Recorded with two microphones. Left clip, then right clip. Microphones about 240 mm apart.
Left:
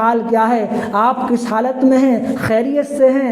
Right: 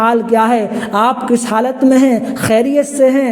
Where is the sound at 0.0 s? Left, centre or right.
Right.